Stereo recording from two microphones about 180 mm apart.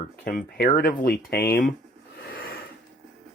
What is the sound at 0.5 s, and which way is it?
Speech, 60° left (ahead or behind).